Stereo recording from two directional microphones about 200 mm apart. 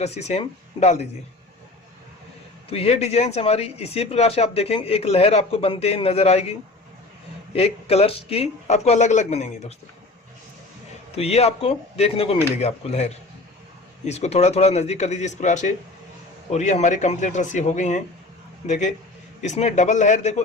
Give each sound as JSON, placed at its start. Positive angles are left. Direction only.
{"t": 0.0, "sound": "speech", "side_deg": 30}
{"t": 2.6, "sound": "speech", "side_deg": 30}
{"t": 11.1, "sound": "speech", "side_deg": 30}